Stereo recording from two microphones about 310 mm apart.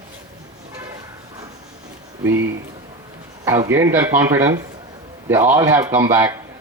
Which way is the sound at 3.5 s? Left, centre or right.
Centre.